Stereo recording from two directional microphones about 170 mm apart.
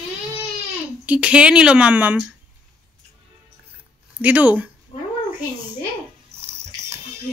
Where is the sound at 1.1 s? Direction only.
5° right (ahead or behind).